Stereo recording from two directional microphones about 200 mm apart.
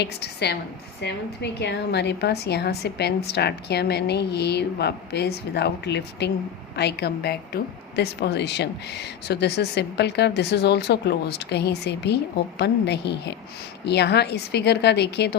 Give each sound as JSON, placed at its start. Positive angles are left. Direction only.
{"t": 0.0, "sound": "a woman's voice", "side_deg": 55}